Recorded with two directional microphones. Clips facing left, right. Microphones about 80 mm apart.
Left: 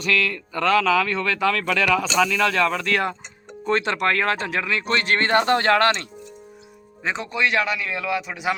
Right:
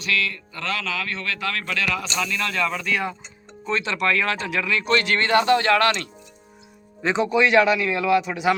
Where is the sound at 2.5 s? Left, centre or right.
Left.